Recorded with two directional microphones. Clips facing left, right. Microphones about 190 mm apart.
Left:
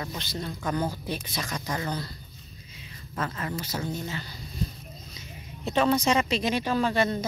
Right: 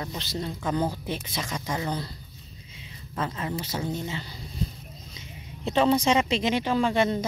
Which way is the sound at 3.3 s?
15° right (ahead or behind).